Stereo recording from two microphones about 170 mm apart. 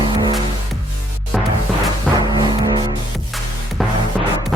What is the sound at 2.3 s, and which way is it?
Music, 25° right (ahead or behind).